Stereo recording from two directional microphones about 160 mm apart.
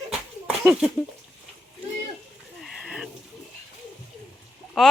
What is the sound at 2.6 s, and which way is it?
Bird, 5° right (ahead or behind).